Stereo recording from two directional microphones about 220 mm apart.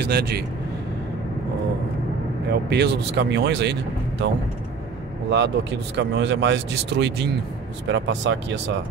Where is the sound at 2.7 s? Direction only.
50° right (ahead or behind).